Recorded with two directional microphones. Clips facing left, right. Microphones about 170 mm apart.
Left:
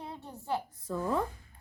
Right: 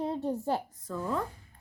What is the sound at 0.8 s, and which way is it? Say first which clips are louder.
Speech: left 4 dB; 10° left (ahead or behind).